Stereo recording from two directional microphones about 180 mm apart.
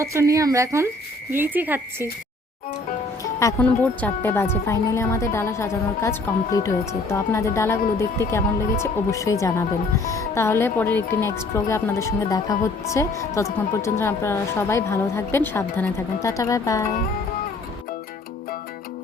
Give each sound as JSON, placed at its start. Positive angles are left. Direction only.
{"t": 0.0, "sound": "speech", "side_deg": -15}
{"t": 3.4, "sound": "speech", "side_deg": 10}